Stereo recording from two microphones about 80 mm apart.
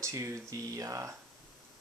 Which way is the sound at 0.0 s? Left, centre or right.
Right.